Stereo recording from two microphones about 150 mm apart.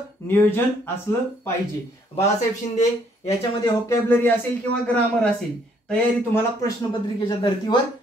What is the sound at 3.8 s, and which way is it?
Speech, 20° left (ahead or behind).